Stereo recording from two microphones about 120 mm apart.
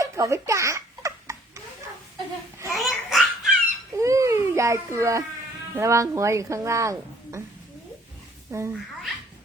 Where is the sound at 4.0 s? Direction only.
25° right (ahead or behind).